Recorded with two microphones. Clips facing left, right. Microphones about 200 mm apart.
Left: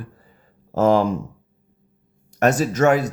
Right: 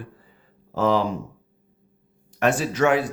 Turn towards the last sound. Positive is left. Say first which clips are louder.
# left 3 dB
turn(degrees=45)  # may be behind; listen again after turning